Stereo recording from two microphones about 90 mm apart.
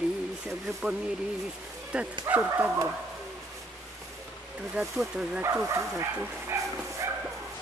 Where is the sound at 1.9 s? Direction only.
10° right (ahead or behind).